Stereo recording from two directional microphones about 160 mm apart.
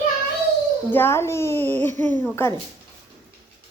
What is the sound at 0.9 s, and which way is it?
Speech, 15° left (ahead or behind).